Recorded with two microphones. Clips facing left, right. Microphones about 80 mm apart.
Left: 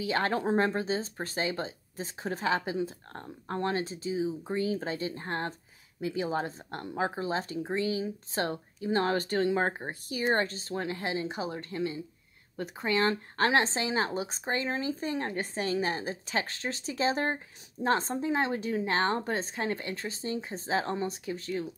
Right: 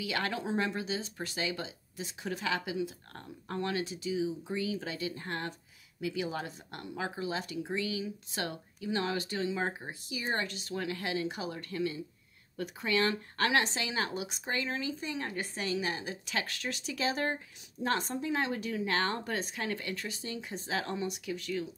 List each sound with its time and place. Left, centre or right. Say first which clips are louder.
0.0 s a woman's voice: left 6 dB; left